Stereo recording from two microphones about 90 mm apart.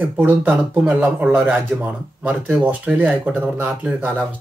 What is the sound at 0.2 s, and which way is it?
Speech, 15° right (ahead or behind).